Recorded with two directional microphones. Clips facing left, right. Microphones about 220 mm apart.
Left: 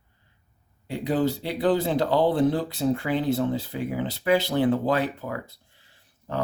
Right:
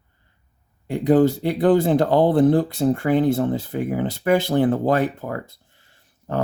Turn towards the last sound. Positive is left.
turn(degrees=-50)  # may be behind; listen again after turning